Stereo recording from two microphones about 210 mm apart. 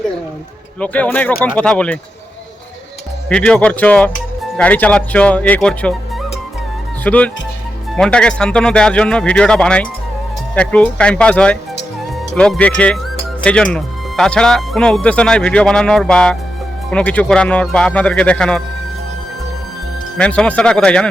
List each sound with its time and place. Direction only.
0.8 s speech: 5° left (ahead or behind)
3.2 s speech: 5° left (ahead or behind)
7.0 s speech: 5° left (ahead or behind)
20.1 s speech: 5° left (ahead or behind)